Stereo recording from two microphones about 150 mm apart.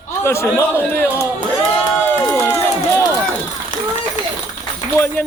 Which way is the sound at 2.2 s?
20° left (ahead or behind).